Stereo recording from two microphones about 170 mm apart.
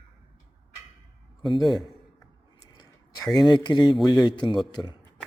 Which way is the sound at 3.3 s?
25° left (ahead or behind).